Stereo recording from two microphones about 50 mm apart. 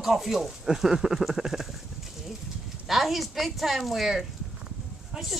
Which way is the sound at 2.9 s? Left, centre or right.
Centre.